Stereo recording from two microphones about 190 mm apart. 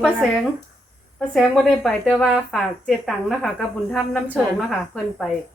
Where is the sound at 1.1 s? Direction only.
Centre (ahead or behind).